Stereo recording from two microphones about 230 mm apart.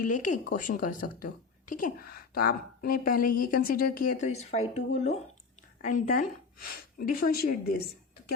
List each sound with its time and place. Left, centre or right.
0.0 s a woman's voice: left